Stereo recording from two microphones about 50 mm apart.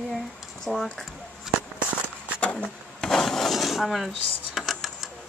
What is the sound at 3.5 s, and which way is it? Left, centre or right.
Dishes, centre.